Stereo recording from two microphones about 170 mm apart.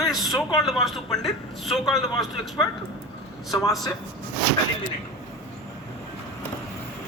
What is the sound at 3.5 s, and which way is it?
Speech, 15° left (ahead or behind).